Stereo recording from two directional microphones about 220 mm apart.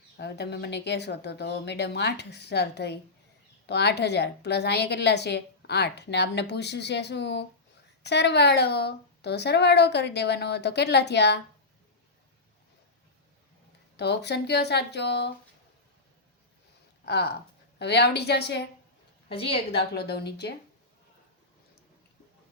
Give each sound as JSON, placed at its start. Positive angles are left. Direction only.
{"t": 0.2, "sound": "a woman's voice", "side_deg": 50}
{"t": 13.9, "sound": "a woman's voice", "side_deg": 50}
{"t": 17.1, "sound": "a woman's voice", "side_deg": 50}
{"t": 19.3, "sound": "a woman's voice", "side_deg": 25}
{"t": 19.9, "sound": "a woman's voice", "side_deg": 50}